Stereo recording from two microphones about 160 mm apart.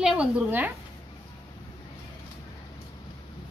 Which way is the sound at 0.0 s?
5° right (ahead or behind).